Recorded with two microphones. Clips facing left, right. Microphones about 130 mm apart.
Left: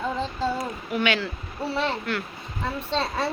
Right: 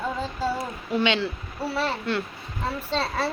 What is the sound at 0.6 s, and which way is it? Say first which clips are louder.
Speech: right 1 dB; 25° right (ahead or behind).